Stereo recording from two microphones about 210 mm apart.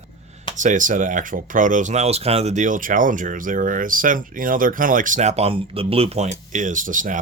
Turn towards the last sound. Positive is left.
turn(degrees=-40)  # may be behind; listen again after turning